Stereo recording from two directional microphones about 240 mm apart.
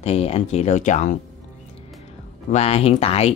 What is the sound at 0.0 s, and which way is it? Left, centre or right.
Speech, left.